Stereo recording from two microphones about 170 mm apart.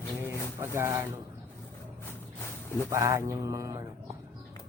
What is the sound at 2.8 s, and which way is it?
Mantra, 20° right (ahead or behind).